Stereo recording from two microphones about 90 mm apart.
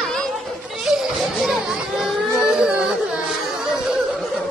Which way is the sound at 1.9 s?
10° right (ahead or behind).